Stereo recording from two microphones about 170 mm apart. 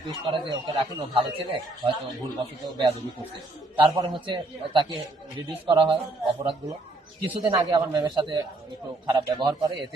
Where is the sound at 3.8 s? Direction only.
25° right (ahead or behind).